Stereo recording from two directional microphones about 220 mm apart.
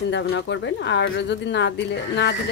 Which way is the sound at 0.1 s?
55° left (ahead or behind).